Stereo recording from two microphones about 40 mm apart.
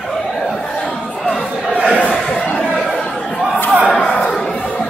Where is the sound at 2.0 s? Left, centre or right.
Left.